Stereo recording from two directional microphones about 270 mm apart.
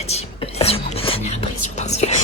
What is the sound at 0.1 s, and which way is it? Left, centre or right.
Whispering, left.